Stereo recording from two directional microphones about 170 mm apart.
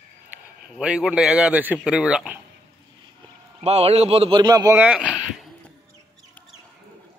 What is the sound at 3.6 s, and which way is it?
Speech, 40° right (ahead or behind).